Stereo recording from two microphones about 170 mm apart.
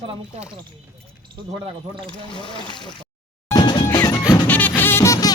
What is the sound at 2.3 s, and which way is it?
Trickle, 30° left (ahead or behind).